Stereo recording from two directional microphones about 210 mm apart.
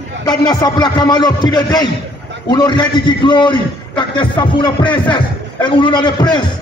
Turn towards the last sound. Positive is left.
turn(degrees=20)  # may be behind; listen again after turning